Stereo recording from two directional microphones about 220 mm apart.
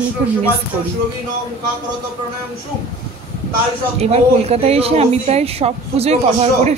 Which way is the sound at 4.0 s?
30° right (ahead or behind).